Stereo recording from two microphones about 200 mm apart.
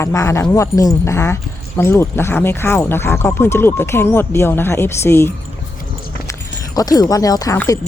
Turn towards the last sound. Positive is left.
turn(degrees=15)  # may be behind; listen again after turning